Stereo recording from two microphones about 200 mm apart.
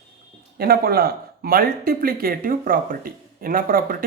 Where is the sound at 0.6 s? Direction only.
50° right (ahead or behind).